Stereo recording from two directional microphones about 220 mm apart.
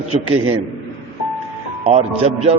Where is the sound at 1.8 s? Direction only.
25° right (ahead or behind).